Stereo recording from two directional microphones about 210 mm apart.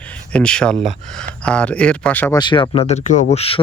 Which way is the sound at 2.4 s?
20° left (ahead or behind).